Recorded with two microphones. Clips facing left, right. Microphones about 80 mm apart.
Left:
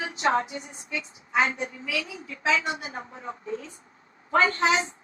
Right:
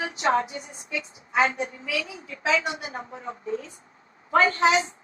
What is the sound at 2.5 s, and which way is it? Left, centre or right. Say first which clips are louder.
A woman's voice: right 1 dB; right.